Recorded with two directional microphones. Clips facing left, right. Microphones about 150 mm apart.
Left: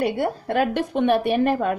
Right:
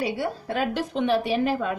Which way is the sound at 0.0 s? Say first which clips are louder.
Left 4 dB; 55° left (ahead or behind).